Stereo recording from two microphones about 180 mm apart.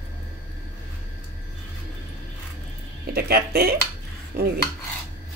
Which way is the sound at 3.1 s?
60° right (ahead or behind).